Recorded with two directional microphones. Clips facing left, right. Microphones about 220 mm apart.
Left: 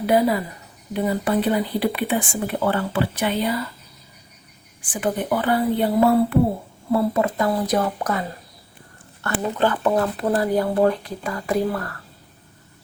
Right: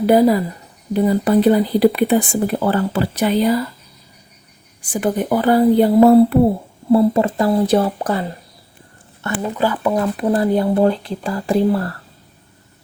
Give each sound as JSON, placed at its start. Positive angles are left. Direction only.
{"t": 0.0, "sound": "speech", "side_deg": -40}
{"t": 4.8, "sound": "speech", "side_deg": -40}
{"t": 6.9, "sound": "speech", "side_deg": -30}
{"t": 9.2, "sound": "speech", "side_deg": -20}
{"t": 9.6, "sound": "speech", "side_deg": -10}
{"t": 10.0, "sound": "speech", "side_deg": -25}